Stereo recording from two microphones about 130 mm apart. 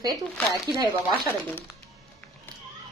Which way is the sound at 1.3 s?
15° left (ahead or behind).